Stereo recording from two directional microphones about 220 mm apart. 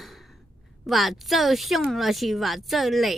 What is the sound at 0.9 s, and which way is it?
Speech, centre (ahead or behind).